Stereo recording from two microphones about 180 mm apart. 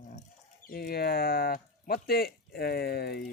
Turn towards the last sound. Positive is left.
turn(degrees=60)  # may be behind; listen again after turning